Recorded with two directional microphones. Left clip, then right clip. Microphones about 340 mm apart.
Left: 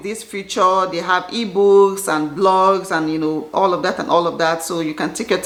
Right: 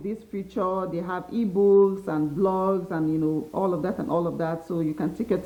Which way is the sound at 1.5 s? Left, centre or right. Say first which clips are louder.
Left 7 dB; centre.